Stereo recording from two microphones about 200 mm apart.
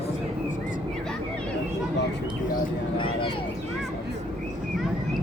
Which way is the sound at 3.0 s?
25° left (ahead or behind).